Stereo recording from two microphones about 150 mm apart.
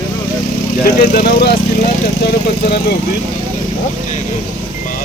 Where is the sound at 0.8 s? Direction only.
85° left.